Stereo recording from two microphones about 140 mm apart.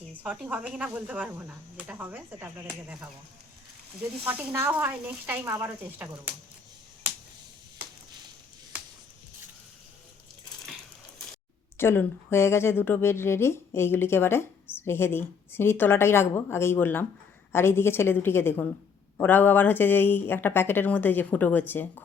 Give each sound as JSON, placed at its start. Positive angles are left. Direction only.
{"t": 0.1, "sound": "speech", "side_deg": -10}
{"t": 4.2, "sound": "speech", "side_deg": -10}
{"t": 11.8, "sound": "speech", "side_deg": 15}